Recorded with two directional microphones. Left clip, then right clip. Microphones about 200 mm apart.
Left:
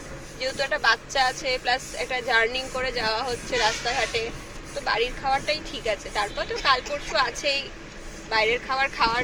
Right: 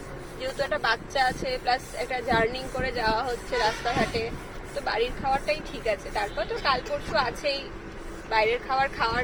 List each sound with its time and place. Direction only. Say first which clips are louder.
0.6 s speech: left 3 dB; centre (ahead or behind)